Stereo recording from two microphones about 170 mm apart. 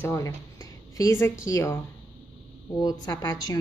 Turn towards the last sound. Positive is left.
turn(degrees=20)  # may be behind; listen again after turning